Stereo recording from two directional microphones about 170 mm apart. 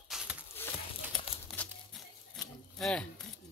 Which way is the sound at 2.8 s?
5° left (ahead or behind).